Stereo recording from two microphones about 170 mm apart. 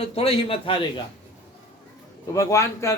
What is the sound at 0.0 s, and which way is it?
Speech, 35° left (ahead or behind).